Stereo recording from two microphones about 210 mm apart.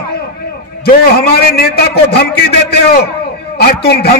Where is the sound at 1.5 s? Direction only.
50° left (ahead or behind).